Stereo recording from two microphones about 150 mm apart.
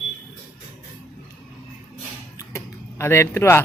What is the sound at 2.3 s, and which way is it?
Typing, 20° left (ahead or behind).